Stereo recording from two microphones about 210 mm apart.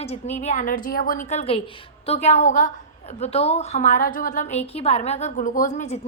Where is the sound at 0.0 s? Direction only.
30° left (ahead or behind).